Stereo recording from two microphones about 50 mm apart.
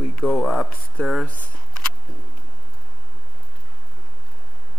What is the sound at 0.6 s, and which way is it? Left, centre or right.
Speech, centre.